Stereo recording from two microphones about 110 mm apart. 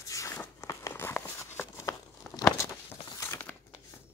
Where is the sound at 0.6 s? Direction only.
30° left (ahead or behind).